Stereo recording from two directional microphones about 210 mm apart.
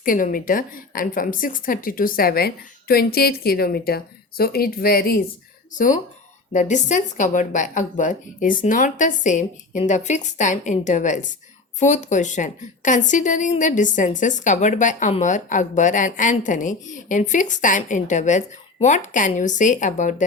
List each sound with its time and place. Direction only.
0.0 s a woman's voice: 40° left (ahead or behind)